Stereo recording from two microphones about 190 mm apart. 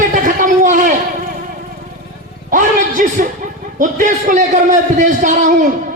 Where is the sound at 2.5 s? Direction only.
45° right (ahead or behind).